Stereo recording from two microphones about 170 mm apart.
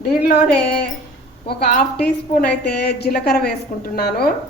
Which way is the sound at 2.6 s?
70° left (ahead or behind).